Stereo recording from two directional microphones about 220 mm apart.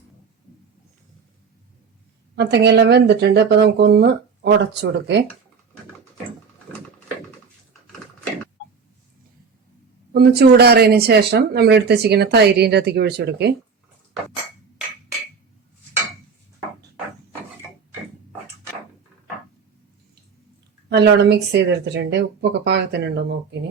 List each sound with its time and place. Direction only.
2.3 s speech: 50° right (ahead or behind)
10.1 s speech: 45° right (ahead or behind)
20.9 s speech: 50° right (ahead or behind)